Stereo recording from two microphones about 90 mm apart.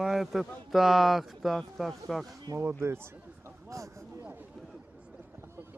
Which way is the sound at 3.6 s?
35° right (ahead or behind).